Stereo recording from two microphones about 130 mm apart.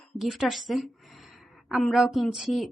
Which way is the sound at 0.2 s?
5° right (ahead or behind).